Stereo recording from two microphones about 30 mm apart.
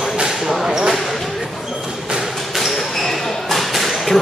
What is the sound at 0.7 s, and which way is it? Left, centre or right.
Basketball bounce, right.